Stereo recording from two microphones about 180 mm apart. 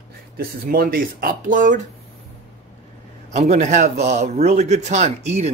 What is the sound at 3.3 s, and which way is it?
Speech, 40° right (ahead or behind).